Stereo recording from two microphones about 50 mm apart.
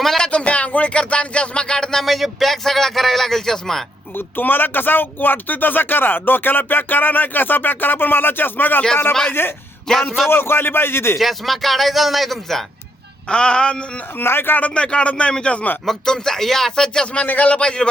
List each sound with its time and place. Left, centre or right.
0.3 s speech: left
2.0 s speech: centre
4.1 s a man's voice: left
9.9 s speech: centre
10.2 s a man's voice: left
11.2 s speech: centre
13.2 s a man's voice: centre
14.2 s a man's voice: left
14.6 s a man's voice: left
17.2 s a man's voice: left